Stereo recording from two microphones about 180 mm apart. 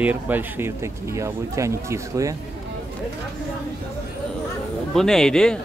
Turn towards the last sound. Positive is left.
turn(degrees=5)  # may be behind; listen again after turning